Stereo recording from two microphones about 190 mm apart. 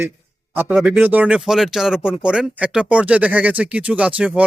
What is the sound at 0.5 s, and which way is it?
Speech, 5° right (ahead or behind).